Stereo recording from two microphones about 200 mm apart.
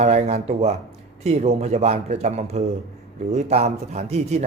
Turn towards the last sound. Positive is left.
turn(degrees=-35)  # may be behind; listen again after turning